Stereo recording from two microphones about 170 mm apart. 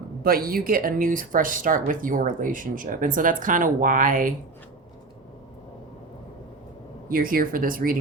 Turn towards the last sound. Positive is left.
turn(degrees=-55)  # may be behind; listen again after turning